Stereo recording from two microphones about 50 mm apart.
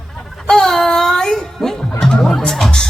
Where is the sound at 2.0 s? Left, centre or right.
Centre.